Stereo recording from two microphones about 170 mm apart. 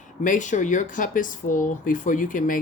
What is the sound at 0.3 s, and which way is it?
Speech, 45° left (ahead or behind).